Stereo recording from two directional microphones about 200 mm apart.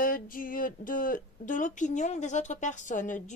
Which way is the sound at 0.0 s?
45° left (ahead or behind).